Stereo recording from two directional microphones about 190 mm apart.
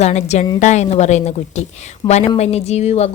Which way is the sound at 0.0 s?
35° left (ahead or behind).